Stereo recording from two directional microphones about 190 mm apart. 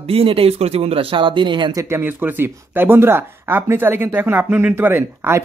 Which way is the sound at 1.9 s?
10° right (ahead or behind).